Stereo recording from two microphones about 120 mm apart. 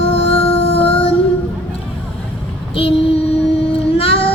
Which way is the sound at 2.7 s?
50° left (ahead or behind).